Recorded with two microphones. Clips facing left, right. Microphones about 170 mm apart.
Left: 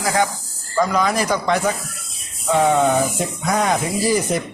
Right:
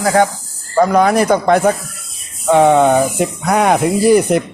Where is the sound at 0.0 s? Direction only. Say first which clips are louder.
Right 7 dB; 55° right (ahead or behind).